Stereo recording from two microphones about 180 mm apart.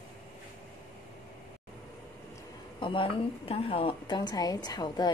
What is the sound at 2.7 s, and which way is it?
A woman's voice, 30° left (ahead or behind).